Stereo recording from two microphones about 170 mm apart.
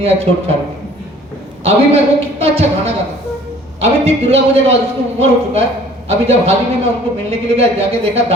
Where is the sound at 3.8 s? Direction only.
35° right (ahead or behind).